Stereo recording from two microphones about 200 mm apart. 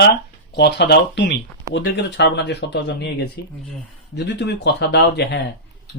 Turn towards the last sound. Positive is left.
turn(degrees=60)  # may be behind; listen again after turning